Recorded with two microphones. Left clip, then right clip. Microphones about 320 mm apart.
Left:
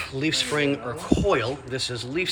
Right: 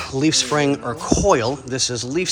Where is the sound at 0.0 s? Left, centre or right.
Centre.